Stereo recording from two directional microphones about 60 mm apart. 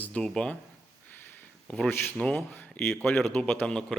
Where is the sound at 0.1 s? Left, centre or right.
Centre.